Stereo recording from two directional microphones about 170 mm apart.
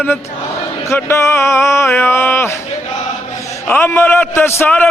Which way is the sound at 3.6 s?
15° left (ahead or behind).